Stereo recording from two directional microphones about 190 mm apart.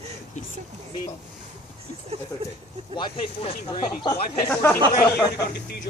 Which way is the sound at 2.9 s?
25° left (ahead or behind).